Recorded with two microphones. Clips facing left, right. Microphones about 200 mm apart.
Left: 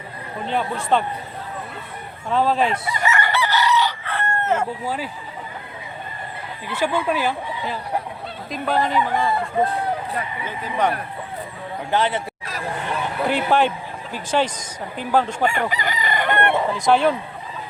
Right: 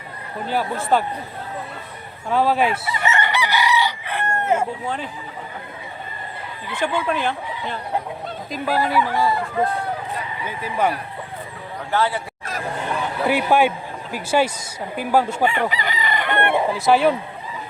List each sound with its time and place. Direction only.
0.4 s speech: 5° right (ahead or behind)
2.3 s speech: 5° right (ahead or behind)
3.0 s chicken: 25° right (ahead or behind)
6.7 s speech: 5° left (ahead or behind)
8.5 s speech: 5° right (ahead or behind)
10.4 s speech: 10° right (ahead or behind)
11.9 s speech: 20° left (ahead or behind)
13.2 s speech: 10° right (ahead or behind)
15.4 s chicken: 45° left (ahead or behind)
16.4 s speech: 10° right (ahead or behind)